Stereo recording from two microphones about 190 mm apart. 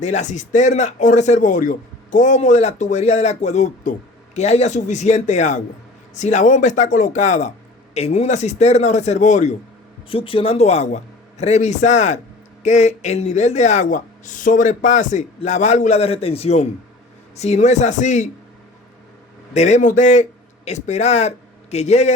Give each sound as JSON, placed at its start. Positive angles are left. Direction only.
{"t": 0.0, "sound": "speech", "side_deg": 40}
{"t": 10.1, "sound": "speech", "side_deg": 30}
{"t": 19.5, "sound": "a man's voice", "side_deg": 35}